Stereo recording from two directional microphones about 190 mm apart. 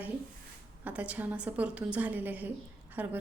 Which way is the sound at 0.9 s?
5° right (ahead or behind).